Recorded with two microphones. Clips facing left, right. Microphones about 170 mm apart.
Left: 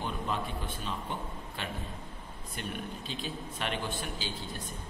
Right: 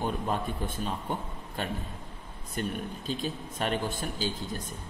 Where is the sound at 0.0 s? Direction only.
45° right (ahead or behind).